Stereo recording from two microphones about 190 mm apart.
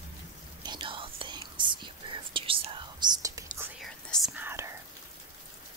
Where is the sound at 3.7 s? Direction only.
Centre (ahead or behind).